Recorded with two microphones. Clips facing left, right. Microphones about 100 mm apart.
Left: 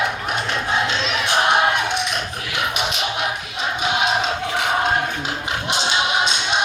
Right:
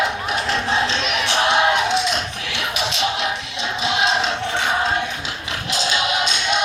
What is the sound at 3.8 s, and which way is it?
Music, 90° right.